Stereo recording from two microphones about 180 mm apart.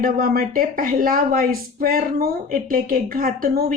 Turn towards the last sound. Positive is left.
turn(degrees=-55)  # may be behind; listen again after turning